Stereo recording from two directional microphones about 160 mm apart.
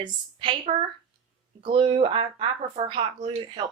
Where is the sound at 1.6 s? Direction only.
30° right (ahead or behind).